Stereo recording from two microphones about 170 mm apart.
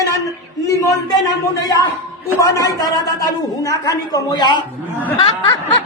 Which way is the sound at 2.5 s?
20° left (ahead or behind).